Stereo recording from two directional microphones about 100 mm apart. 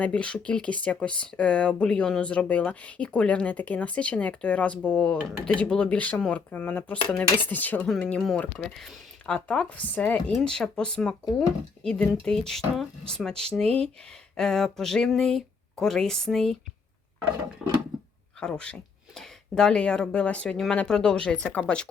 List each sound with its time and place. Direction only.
0.0 s speech: 10° left (ahead or behind)
18.3 s speech: 10° left (ahead or behind)